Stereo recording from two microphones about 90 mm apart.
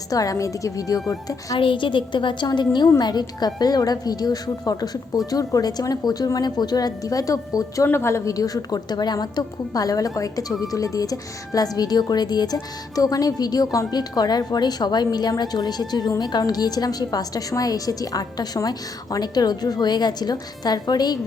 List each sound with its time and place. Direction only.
0.1 s a woman's voice: 40° left (ahead or behind)
1.5 s a woman's voice: 70° left (ahead or behind)
3.0 s a woman's voice: 50° left (ahead or behind)
7.9 s a woman's voice: 30° left (ahead or behind); by 21.2 s 50° left (ahead or behind)